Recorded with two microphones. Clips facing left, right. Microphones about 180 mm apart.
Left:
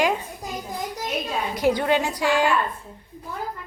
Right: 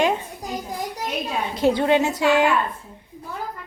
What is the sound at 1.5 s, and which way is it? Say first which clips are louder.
A woman's voice: right 3 dB; 25° right (ahead or behind).